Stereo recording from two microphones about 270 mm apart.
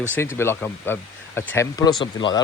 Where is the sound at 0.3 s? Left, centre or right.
Centre.